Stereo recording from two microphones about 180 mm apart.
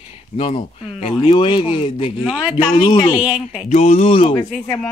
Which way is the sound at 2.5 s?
25° left (ahead or behind).